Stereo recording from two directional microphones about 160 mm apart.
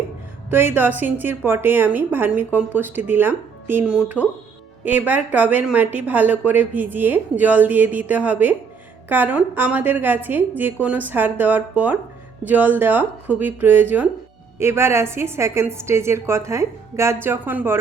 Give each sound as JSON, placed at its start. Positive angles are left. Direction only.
{"t": 0.5, "sound": "speech", "side_deg": -15}